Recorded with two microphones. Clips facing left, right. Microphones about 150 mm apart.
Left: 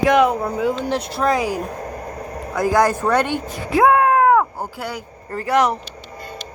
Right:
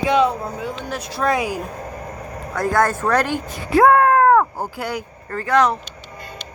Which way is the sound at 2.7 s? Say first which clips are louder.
Left 1 dB; 15° left (ahead or behind).